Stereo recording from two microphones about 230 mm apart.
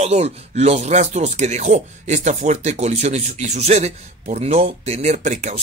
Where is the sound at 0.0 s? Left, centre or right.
Right.